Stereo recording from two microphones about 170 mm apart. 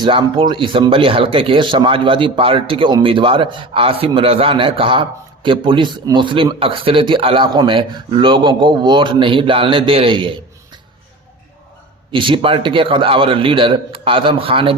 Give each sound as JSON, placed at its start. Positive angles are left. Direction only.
{"t": 0.0, "sound": "speech", "side_deg": -30}
{"t": 12.1, "sound": "speech", "side_deg": -30}